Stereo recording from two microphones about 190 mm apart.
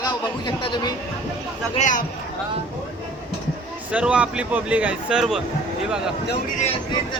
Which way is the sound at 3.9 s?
5° right (ahead or behind).